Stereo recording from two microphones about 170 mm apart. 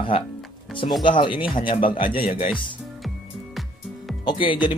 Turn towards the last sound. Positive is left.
turn(degrees=30)  # may be behind; listen again after turning